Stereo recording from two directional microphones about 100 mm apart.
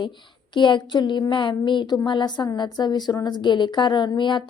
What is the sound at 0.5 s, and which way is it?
A woman's voice, 55° left (ahead or behind).